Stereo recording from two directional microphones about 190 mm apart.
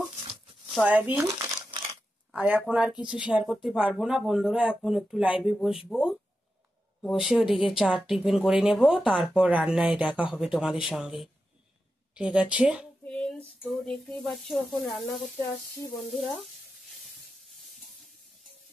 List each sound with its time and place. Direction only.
0.7 s a woman's voice: 10° right (ahead or behind)
1.4 s crumpling: 25° right (ahead or behind)
2.3 s a woman's voice: 5° right (ahead or behind)
13.0 s a sound: 5° left (ahead or behind)
13.6 s speech: centre (ahead or behind)